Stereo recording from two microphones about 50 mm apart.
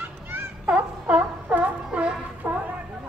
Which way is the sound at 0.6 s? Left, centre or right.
Right.